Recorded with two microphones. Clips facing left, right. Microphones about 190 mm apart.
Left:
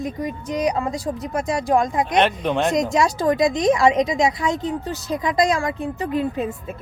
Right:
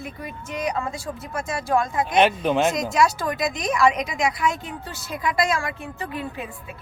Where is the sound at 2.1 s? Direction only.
5° right (ahead or behind).